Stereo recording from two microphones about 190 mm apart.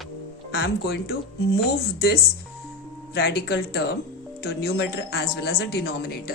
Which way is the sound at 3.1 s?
55° left (ahead or behind).